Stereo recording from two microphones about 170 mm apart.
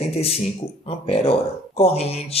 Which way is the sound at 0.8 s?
35° left (ahead or behind).